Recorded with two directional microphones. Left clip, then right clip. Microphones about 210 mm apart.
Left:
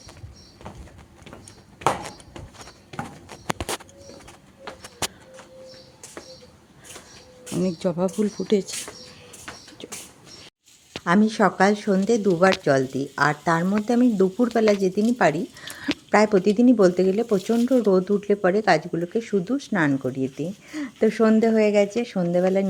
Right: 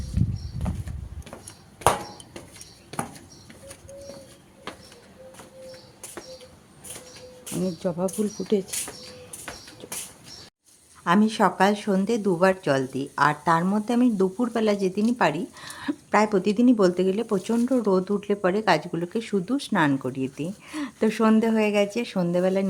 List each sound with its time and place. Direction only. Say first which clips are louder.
7.5 s speech: left 3 dB; 20° left (ahead or behind)
11.0 s speech: left 1 dB; 10° left (ahead or behind)